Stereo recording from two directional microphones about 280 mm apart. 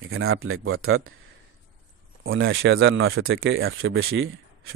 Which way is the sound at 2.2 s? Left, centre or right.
Right.